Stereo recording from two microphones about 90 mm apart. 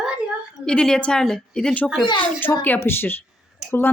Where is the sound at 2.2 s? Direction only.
20° left (ahead or behind).